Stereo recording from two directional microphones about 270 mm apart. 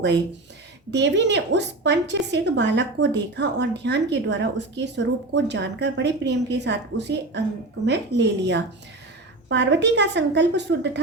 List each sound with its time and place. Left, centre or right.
0.9 s a woman's voice: right